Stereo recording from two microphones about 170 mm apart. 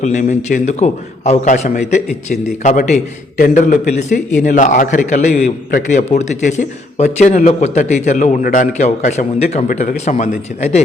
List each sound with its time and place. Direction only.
0.0 s a man's voice: 45° left (ahead or behind)